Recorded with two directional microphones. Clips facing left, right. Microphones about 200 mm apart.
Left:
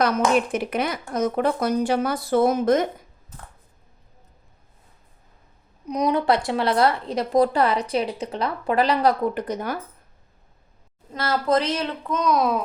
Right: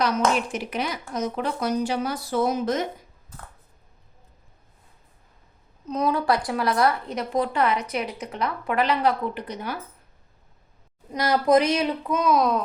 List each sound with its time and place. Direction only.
0.3 s speech: 55° left (ahead or behind)
5.8 s speech: 15° left (ahead or behind); by 9.7 s 45° left (ahead or behind)
11.1 s speech: 15° right (ahead or behind); by 12.6 s 5° left (ahead or behind)